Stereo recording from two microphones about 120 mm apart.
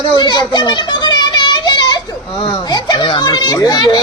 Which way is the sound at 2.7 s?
35° left (ahead or behind).